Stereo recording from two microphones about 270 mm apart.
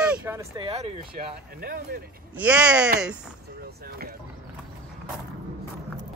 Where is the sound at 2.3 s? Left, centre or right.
Centre.